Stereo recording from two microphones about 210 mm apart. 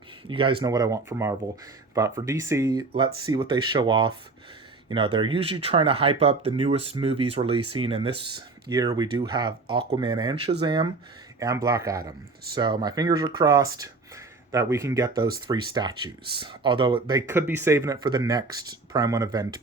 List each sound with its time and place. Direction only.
0.3 s speech: 25° right (ahead or behind)